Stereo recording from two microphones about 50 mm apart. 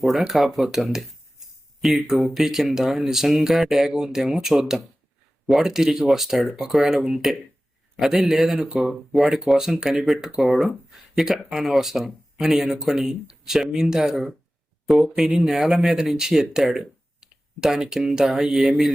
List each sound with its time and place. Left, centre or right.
0.0 s speech: centre